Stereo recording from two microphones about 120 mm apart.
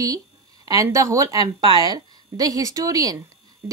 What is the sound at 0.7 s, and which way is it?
Speech, 30° right (ahead or behind).